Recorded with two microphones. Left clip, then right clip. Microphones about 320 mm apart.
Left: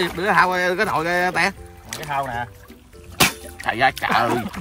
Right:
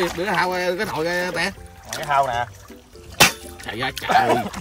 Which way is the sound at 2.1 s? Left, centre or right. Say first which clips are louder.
Right 5 dB; right.